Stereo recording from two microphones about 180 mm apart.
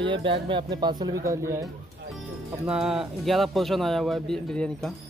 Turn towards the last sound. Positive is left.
turn(degrees=5)  # may be behind; listen again after turning